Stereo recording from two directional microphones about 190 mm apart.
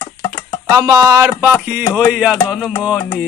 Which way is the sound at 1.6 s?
10° right (ahead or behind).